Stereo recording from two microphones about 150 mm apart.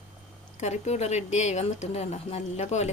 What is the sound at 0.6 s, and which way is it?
A woman's voice, 50° left (ahead or behind).